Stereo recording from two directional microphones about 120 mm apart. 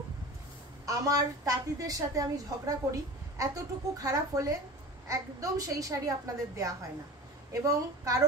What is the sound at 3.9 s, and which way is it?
A woman's voice, 30° right (ahead or behind).